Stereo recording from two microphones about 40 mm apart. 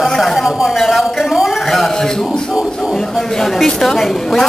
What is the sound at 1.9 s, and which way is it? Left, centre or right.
Speech, centre.